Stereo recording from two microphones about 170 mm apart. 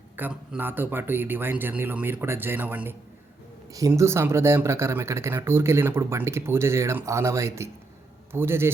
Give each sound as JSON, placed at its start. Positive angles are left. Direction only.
{"t": 0.2, "sound": "speech", "side_deg": -10}